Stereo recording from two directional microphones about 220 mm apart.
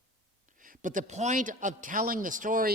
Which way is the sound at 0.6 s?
35° right (ahead or behind).